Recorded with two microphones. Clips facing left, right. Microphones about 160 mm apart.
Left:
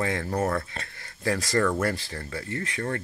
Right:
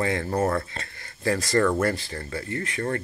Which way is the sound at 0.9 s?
Centre (ahead or behind).